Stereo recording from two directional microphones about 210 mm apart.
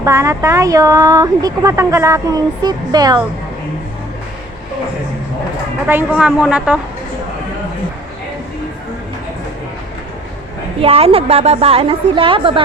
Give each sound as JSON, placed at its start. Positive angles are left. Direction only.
{"t": 0.0, "sound": "speech", "side_deg": -15}
{"t": 5.9, "sound": "speech", "side_deg": -10}
{"t": 10.8, "sound": "a woman's voice", "side_deg": -30}